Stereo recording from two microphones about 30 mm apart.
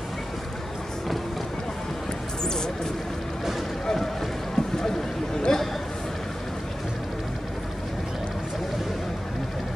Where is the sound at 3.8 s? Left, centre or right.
Centre.